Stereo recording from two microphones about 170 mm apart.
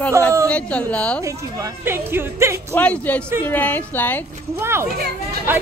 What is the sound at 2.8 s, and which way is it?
A woman's voice, 10° left (ahead or behind).